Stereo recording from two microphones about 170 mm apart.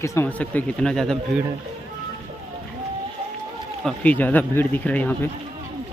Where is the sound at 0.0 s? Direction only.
15° left (ahead or behind).